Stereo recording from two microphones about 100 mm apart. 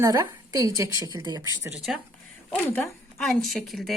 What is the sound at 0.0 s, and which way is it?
A woman's voice, 30° right (ahead or behind).